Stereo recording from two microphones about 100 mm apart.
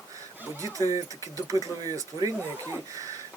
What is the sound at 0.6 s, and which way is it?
Speech, 35° right (ahead or behind).